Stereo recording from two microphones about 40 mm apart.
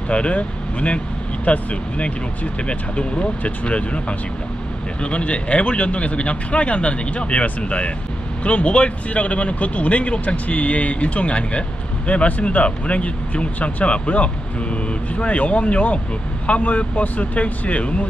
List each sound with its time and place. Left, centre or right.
0.1 s speech: left
5.0 s speech: left